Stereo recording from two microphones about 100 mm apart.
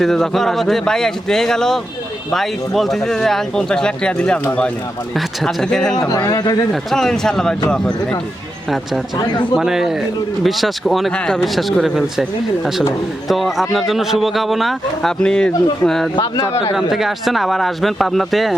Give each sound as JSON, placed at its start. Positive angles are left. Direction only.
{"t": 0.0, "sound": "a man's voice", "side_deg": 5}
{"t": 6.1, "sound": "speech", "side_deg": 35}
{"t": 6.9, "sound": "a man's voice", "side_deg": 5}
{"t": 9.1, "sound": "a man's voice", "side_deg": 45}
{"t": 9.6, "sound": "a man's voice", "side_deg": -5}
{"t": 13.2, "sound": "a man's voice", "side_deg": 0}
{"t": 16.2, "sound": "speech", "side_deg": 30}
{"t": 16.7, "sound": "a man's voice", "side_deg": -5}